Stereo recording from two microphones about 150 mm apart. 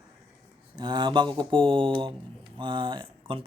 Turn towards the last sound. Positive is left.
turn(degrees=-35)  # may be behind; listen again after turning